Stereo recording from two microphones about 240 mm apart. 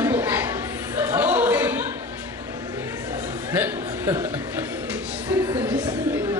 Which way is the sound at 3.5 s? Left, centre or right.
Centre.